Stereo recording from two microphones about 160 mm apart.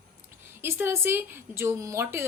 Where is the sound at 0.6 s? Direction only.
15° right (ahead or behind).